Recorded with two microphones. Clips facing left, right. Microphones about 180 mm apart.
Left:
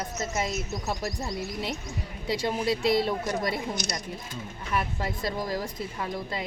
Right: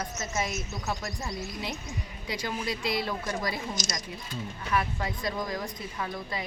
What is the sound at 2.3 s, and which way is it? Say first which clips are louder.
Speech: left 6 dB; 30° left (ahead or behind).